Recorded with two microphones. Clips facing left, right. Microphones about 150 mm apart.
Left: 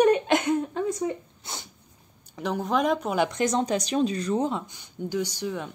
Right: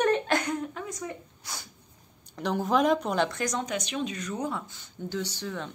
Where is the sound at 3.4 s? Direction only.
30° left (ahead or behind); by 5.7 s 15° left (ahead or behind).